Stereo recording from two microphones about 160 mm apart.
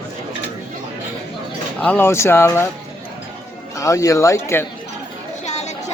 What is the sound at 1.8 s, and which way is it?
Speech, 10° left (ahead or behind).